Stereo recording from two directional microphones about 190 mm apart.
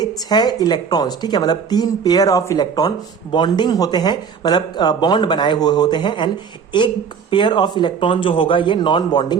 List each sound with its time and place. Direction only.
0.0 s speech: 20° left (ahead or behind)